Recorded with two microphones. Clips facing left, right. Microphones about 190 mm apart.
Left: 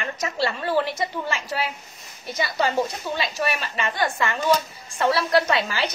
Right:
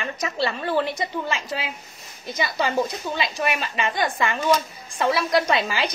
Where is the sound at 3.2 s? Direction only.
15° right (ahead or behind).